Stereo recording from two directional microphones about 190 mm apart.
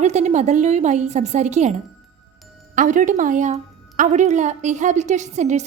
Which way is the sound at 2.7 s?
45° right (ahead or behind).